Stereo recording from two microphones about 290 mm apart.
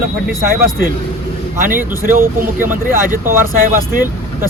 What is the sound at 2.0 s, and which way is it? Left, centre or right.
Speech, right.